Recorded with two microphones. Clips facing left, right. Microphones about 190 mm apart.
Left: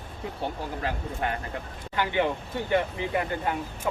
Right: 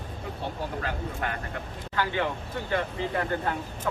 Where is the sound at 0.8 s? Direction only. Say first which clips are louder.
Left 5 dB; 25° left (ahead or behind).